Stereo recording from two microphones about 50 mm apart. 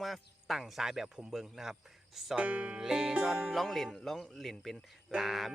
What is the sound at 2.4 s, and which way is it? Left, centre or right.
Music, right.